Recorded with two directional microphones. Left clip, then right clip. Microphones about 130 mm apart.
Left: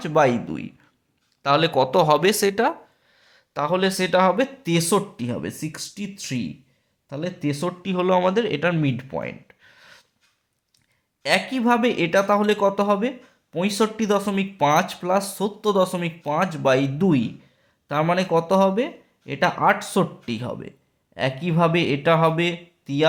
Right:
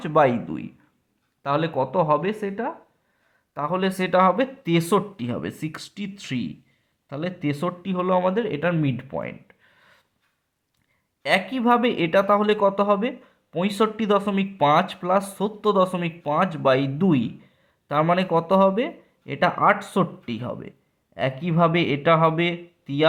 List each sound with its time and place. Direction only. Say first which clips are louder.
0.0 s speech: even; 15° left (ahead or behind)
1.8 s speech: left 2 dB; 45° left (ahead or behind)
3.5 s speech: left 3 dB; 30° left (ahead or behind)
11.2 s speech: left 1 dB; 20° left (ahead or behind)